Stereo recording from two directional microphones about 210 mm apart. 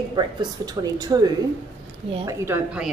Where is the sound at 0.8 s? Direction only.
20° right (ahead or behind).